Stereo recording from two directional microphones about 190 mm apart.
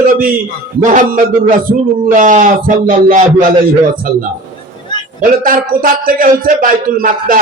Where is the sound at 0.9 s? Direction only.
40° right (ahead or behind).